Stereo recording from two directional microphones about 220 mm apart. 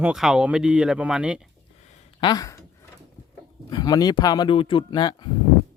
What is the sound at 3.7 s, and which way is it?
Speech, 20° left (ahead or behind).